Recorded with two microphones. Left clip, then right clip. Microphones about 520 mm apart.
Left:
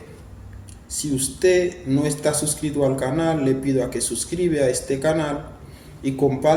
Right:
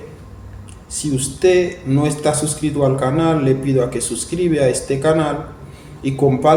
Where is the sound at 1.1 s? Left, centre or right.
Left.